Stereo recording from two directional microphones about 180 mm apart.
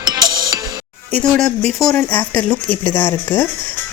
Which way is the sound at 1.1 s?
5° left (ahead or behind).